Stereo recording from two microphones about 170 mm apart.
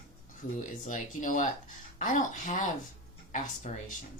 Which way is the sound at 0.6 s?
50° left (ahead or behind).